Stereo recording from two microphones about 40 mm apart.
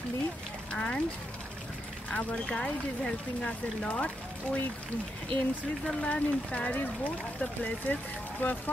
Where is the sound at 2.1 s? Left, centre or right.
Left.